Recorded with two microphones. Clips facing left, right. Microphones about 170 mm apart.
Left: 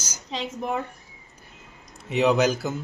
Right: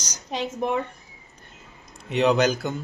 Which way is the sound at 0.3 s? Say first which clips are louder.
Right 3 dB; 65° right (ahead or behind).